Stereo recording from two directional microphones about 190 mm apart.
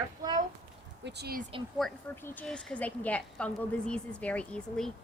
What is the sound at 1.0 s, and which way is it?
Speech, 60° right (ahead or behind).